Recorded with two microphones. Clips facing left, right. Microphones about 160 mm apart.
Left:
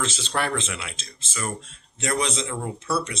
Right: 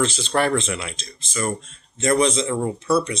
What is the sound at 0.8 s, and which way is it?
Speech, 5° left (ahead or behind).